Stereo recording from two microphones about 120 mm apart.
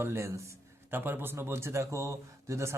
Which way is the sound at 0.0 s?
20° right (ahead or behind).